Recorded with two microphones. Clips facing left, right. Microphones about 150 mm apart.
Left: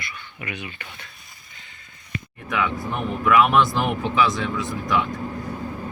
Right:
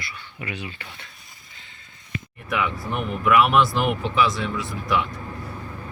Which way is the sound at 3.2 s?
5° right (ahead or behind).